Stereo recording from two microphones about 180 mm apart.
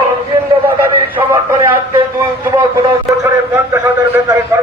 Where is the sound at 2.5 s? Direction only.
20° right (ahead or behind).